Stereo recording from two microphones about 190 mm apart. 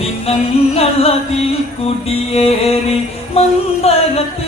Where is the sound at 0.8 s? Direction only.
30° left (ahead or behind).